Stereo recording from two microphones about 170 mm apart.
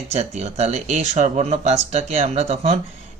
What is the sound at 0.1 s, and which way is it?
Speech, 40° right (ahead or behind).